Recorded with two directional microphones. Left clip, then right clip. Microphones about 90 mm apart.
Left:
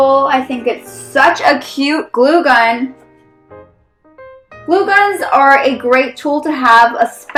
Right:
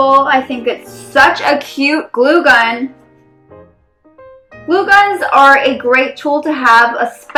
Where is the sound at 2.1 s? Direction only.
30° left (ahead or behind).